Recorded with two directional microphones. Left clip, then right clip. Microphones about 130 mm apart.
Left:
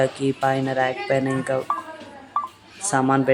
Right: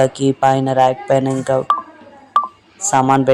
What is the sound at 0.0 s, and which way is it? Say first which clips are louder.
A woman's voice: right 7 dB; 25° right (ahead or behind).